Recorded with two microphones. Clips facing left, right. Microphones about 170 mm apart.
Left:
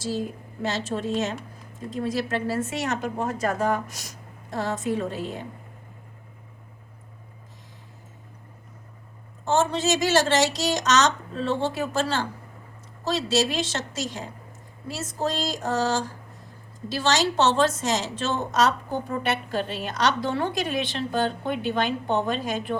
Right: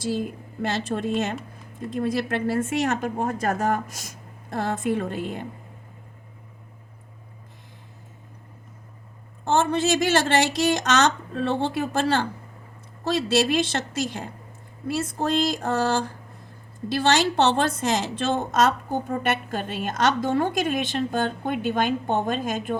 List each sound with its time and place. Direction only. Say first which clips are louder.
0.6 s a woman's voice: right 2 dB; 55° right (ahead or behind)
9.4 s a woman's voice: right 1 dB; 55° right (ahead or behind)